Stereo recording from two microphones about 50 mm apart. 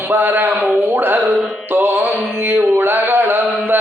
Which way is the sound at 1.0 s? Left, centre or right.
Right.